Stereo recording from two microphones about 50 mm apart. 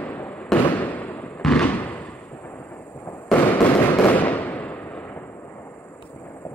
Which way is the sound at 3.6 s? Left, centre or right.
Left.